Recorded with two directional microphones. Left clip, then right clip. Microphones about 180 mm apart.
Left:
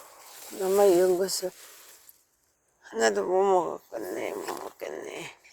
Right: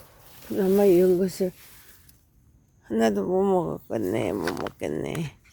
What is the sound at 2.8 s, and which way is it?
Speech, 35° right (ahead or behind).